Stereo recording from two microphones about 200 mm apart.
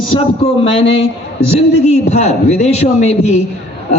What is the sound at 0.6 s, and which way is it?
Speech, 25° left (ahead or behind).